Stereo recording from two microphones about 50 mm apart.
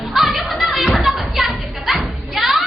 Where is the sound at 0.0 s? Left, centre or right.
Centre.